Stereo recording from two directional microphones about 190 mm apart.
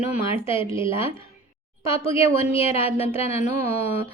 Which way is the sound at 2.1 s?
30° left (ahead or behind).